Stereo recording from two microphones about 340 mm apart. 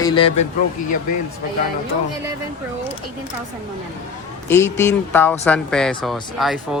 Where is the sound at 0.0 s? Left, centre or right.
Centre.